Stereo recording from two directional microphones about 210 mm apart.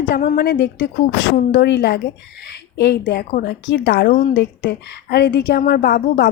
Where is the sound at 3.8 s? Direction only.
65° left (ahead or behind).